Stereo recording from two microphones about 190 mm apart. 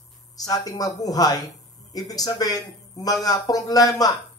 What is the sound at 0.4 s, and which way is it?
Speech, 20° left (ahead or behind).